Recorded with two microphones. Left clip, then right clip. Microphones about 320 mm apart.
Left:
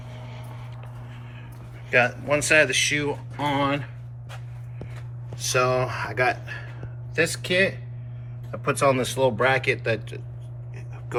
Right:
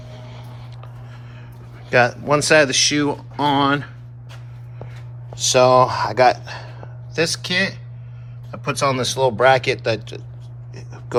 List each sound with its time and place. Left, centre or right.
1.9 s speech: centre
5.4 s speech: centre